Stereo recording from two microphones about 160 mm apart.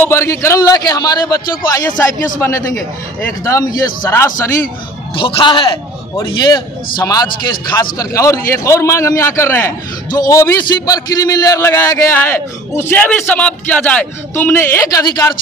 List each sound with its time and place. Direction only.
0.0 s a man's voice: 15° left (ahead or behind)
5.1 s a man's voice: 35° left (ahead or behind)